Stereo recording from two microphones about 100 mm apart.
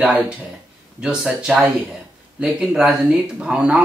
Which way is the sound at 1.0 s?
10° right (ahead or behind).